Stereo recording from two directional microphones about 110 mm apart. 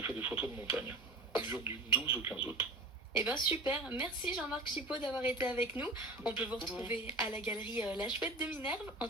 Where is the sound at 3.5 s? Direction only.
15° right (ahead or behind).